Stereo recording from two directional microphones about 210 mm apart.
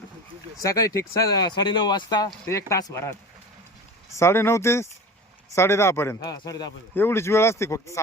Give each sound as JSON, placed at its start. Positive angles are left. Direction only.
{"t": 0.6, "sound": "speech", "side_deg": 15}
{"t": 4.2, "sound": "speech", "side_deg": 10}